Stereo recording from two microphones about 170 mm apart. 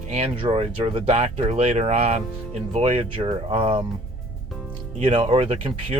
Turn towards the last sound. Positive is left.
turn(degrees=-30)  # may be behind; listen again after turning